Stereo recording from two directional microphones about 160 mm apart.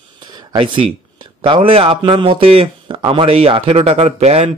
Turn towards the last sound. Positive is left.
turn(degrees=-40)  # may be behind; listen again after turning